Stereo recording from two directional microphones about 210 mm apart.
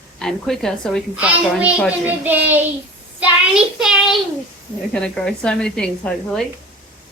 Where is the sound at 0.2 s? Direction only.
Centre (ahead or behind).